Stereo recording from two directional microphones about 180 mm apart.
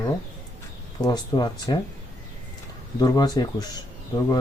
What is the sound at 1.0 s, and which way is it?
Speech, 20° left (ahead or behind).